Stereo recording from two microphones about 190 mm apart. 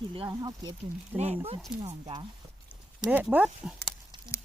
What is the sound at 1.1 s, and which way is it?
Speech, 35° right (ahead or behind).